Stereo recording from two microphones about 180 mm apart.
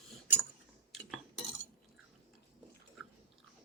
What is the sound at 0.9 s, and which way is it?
Cutlery, centre (ahead or behind).